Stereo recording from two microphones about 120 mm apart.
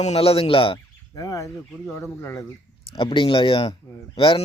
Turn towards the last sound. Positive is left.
turn(degrees=45)  # may be behind; listen again after turning